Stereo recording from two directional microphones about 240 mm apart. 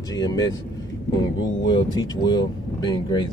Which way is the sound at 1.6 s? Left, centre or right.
Centre.